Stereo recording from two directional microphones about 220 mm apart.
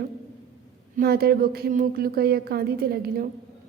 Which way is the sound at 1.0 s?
45° right (ahead or behind).